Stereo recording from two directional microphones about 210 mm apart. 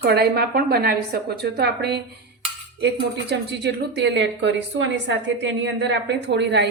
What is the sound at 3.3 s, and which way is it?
A woman's voice, 55° right (ahead or behind).